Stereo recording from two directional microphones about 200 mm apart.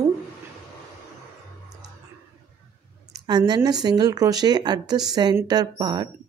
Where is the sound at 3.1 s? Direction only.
20° right (ahead or behind).